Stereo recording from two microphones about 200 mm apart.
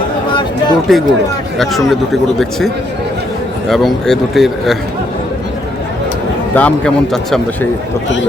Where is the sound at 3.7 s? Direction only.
Centre (ahead or behind).